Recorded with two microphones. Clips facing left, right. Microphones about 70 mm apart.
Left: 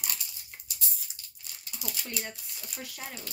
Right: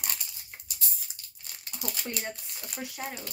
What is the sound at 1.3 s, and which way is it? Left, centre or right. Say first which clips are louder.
Crumpling: right 3 dB; right.